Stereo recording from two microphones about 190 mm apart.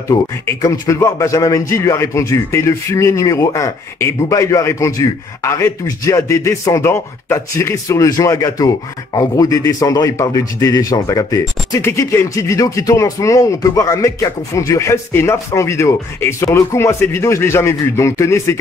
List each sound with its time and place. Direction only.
0.1 s a man's voice: 15° left (ahead or behind)